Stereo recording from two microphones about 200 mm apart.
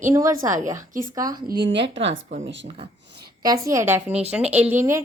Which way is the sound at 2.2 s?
40° right (ahead or behind).